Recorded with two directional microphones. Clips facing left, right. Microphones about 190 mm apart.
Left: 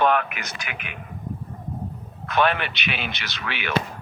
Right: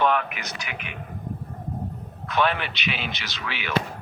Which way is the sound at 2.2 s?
60° left (ahead or behind).